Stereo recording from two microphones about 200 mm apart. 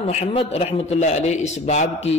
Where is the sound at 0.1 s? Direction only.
30° left (ahead or behind).